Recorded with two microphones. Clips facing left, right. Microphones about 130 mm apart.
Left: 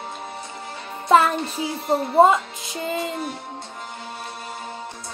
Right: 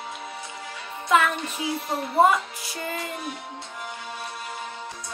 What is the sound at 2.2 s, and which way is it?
Speech, 25° left (ahead or behind).